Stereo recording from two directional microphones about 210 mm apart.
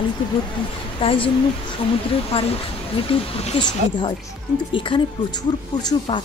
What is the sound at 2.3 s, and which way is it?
A woman's voice, 30° left (ahead or behind).